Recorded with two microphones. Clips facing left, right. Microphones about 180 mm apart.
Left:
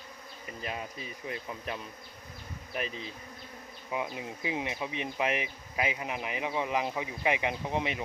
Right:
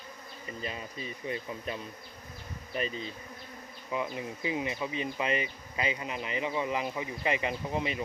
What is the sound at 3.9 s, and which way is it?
Bee, 10° left (ahead or behind).